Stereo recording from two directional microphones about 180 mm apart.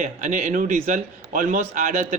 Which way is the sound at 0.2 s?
45° right (ahead or behind).